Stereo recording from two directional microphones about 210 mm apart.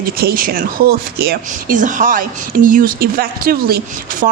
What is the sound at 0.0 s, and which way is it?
Speech, 45° right (ahead or behind).